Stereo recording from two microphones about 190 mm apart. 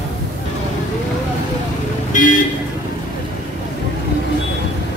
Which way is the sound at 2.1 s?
45° left (ahead or behind).